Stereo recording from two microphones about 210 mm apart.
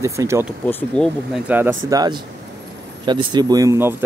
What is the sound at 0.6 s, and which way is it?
Speech, 5° left (ahead or behind).